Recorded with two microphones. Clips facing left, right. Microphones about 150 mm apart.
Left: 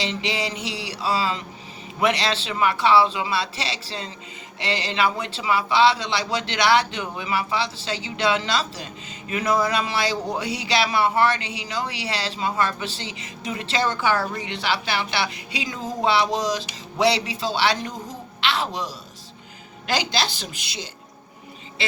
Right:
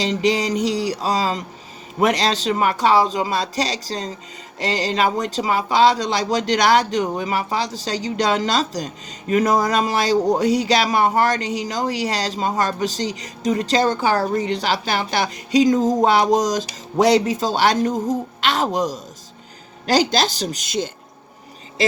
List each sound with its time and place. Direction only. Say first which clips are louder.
0.0 s a man's voice: right 7 dB; 40° right (ahead or behind)